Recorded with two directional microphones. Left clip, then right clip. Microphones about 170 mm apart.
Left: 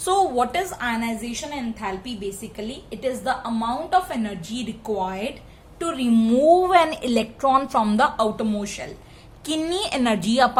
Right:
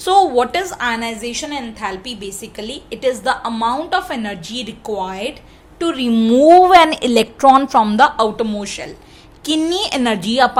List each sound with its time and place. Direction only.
0.0 s a woman's voice: 15° right (ahead or behind)